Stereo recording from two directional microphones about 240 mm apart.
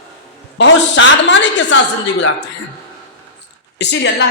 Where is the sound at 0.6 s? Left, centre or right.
Left.